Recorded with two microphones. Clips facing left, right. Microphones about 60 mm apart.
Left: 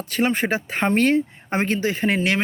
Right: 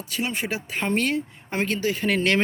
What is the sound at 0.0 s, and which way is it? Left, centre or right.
Speech, left.